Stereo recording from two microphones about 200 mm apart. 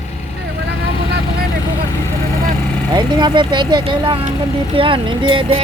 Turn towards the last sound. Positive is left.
turn(degrees=-25)  # may be behind; listen again after turning